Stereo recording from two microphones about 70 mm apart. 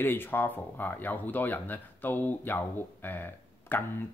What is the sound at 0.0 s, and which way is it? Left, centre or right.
Speech, left.